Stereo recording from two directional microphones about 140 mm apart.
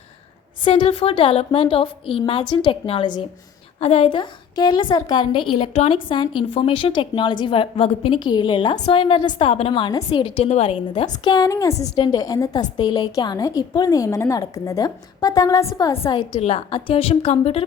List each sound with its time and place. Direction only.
0.6 s a woman's voice: 40° left (ahead or behind)
11.2 s a woman's voice: 30° left (ahead or behind)
16.3 s a woman's voice: 50° left (ahead or behind)